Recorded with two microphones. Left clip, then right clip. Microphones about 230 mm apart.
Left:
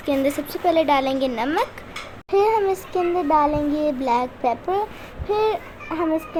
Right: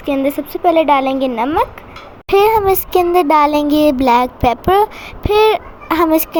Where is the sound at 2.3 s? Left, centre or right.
Right.